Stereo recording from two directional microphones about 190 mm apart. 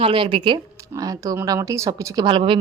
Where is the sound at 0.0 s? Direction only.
25° right (ahead or behind).